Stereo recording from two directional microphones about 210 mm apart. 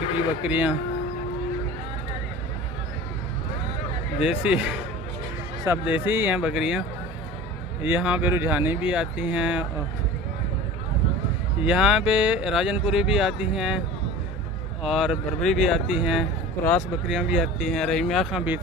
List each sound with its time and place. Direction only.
0.4 s speech: 5° right (ahead or behind)
4.2 s speech: 5° right (ahead or behind)
7.8 s speech: 10° right (ahead or behind)
11.6 s speech: 5° right (ahead or behind)